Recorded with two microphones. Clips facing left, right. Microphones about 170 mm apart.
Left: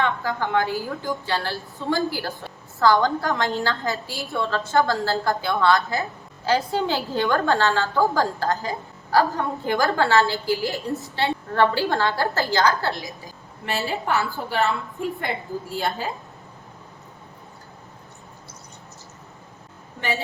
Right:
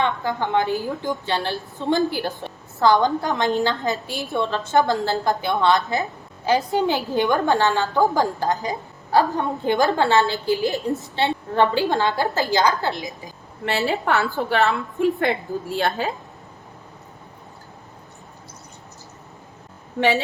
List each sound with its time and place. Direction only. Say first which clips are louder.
0.0 s a woman's voice: right 1 dB; 20° right (ahead or behind)
13.7 s a woman's voice: right 4 dB; 75° right (ahead or behind)
20.0 s a woman's voice: right 8 dB; 80° right